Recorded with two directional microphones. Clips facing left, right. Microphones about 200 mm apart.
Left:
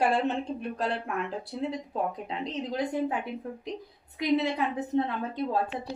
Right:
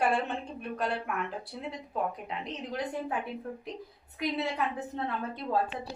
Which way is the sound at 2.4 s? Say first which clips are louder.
Left 5 dB; 20° left (ahead or behind).